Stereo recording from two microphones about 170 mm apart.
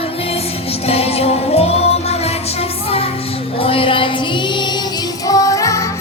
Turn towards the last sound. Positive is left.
turn(degrees=20)  # may be behind; listen again after turning